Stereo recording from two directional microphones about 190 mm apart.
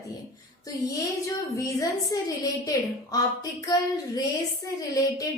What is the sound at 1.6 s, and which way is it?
Speech, 20° left (ahead or behind).